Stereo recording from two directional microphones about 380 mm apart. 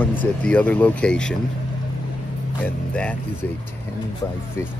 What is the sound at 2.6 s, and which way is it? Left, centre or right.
Speech, centre.